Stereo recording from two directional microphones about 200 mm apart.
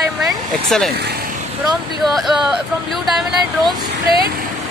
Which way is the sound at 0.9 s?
50° right (ahead or behind).